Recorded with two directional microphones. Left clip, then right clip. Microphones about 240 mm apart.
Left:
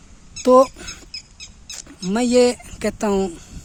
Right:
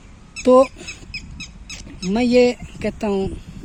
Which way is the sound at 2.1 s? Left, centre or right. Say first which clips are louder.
Right 1 dB; centre.